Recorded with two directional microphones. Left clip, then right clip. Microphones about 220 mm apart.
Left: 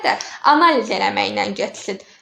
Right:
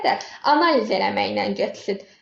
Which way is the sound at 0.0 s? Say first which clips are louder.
Left 4 dB; 15° left (ahead or behind).